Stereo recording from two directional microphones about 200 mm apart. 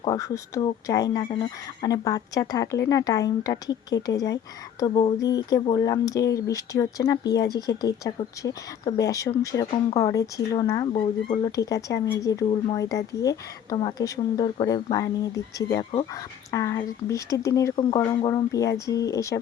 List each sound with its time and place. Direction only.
0.0 s speech: 20° left (ahead or behind)